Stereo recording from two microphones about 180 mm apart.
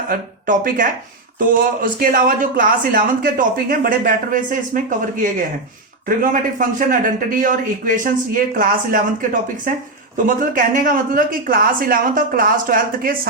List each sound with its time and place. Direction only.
0.1 s speech: 50° right (ahead or behind)